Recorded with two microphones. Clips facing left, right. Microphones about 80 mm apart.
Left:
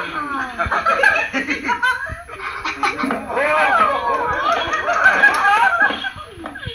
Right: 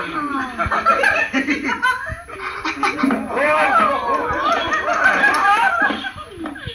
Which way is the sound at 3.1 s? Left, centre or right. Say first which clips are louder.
Even; centre.